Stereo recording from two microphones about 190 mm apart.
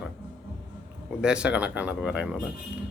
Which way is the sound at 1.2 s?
5° right (ahead or behind).